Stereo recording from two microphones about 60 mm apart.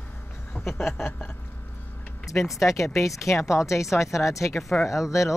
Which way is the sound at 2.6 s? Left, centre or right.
Left.